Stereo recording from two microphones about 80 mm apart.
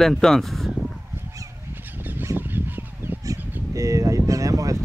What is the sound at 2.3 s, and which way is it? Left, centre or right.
Fowl, right.